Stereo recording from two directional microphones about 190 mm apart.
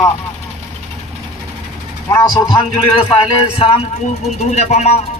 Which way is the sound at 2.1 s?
20° left (ahead or behind).